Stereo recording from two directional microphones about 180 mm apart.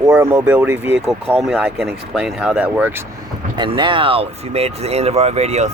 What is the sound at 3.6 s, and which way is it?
Speech, 25° right (ahead or behind).